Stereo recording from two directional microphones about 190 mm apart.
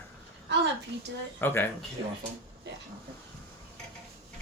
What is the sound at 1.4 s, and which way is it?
Speech, 10° left (ahead or behind).